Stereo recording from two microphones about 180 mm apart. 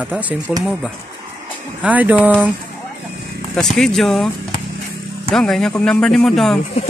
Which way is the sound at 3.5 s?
Centre (ahead or behind).